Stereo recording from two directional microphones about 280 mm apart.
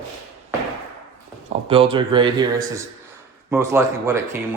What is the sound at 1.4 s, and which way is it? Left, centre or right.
Speech, centre.